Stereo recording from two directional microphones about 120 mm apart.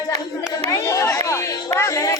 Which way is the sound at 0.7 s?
25° left (ahead or behind).